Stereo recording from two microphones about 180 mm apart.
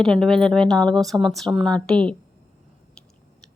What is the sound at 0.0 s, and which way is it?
Speech, 5° left (ahead or behind).